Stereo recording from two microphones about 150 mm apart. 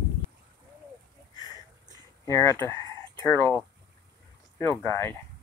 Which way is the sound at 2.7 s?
20° left (ahead or behind).